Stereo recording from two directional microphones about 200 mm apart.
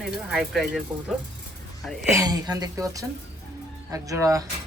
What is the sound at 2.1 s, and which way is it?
A woman's voice, 20° right (ahead or behind).